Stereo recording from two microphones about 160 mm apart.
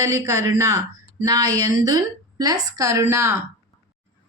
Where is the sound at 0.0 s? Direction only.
20° right (ahead or behind).